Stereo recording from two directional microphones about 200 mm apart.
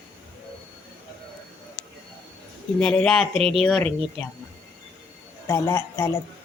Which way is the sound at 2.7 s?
5° left (ahead or behind).